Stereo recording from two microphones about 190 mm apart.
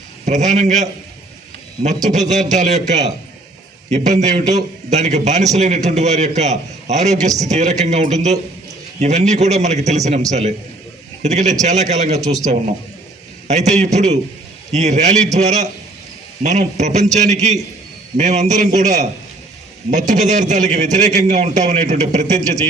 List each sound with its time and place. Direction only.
0.3 s a man's voice: 40° right (ahead or behind)
12.2 s speech: 20° right (ahead or behind)
13.5 s a man's voice: 35° right (ahead or behind)